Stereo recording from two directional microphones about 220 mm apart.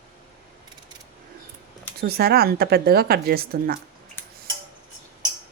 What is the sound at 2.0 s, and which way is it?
Speech, 45° right (ahead or behind).